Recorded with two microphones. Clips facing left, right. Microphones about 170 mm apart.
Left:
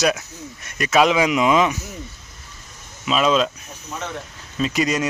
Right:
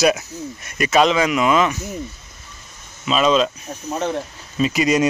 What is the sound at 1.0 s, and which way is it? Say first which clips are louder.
Speech: left 2 dB; 10° left (ahead or behind).